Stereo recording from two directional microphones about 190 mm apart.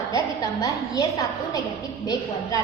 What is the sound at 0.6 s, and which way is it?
A woman's voice, 20° left (ahead or behind).